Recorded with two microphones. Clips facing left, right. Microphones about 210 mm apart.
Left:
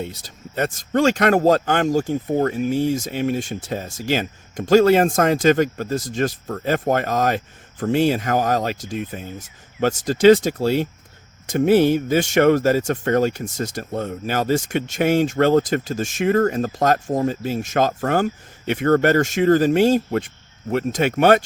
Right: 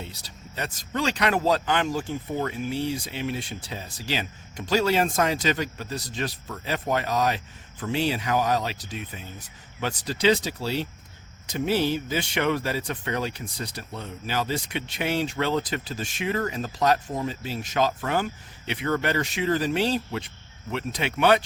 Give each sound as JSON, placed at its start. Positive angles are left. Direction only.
{"t": 0.0, "sound": "speech", "side_deg": 50}